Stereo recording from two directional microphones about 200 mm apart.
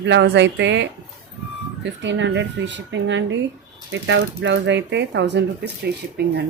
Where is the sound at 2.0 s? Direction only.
65° right (ahead or behind).